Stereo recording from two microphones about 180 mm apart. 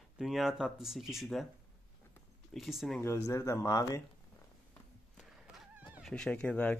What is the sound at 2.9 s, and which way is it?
Speech, 15° left (ahead or behind).